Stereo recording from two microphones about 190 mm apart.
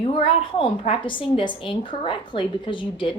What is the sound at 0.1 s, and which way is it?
A woman's voice, 30° left (ahead or behind).